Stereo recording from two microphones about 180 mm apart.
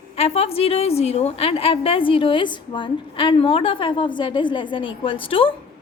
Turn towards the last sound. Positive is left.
turn(degrees=30)  # may be behind; listen again after turning